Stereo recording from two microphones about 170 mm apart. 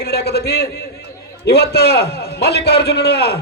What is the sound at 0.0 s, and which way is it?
A man's voice, 70° left (ahead or behind).